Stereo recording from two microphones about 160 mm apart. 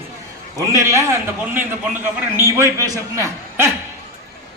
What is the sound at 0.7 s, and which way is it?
A man's voice, 20° right (ahead or behind).